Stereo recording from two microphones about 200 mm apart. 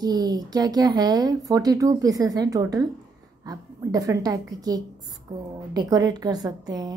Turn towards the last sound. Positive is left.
turn(degrees=-20)  # may be behind; listen again after turning